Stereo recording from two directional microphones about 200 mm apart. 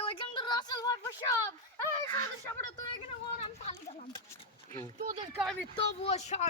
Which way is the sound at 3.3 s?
30° left (ahead or behind).